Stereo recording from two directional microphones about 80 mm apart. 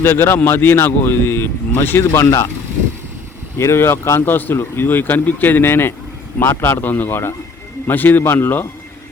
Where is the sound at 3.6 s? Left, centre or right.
Left.